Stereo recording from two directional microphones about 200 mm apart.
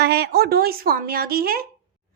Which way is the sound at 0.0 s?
55° right (ahead or behind).